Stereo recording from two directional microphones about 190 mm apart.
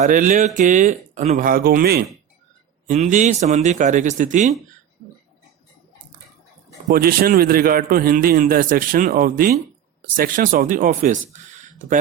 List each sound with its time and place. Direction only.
0.0 s a man's voice: 45° right (ahead or behind)
2.8 s speech: 40° right (ahead or behind)
6.8 s a man's voice: 50° right (ahead or behind)